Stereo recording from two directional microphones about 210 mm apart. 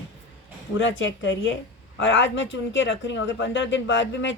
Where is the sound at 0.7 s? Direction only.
60° left (ahead or behind).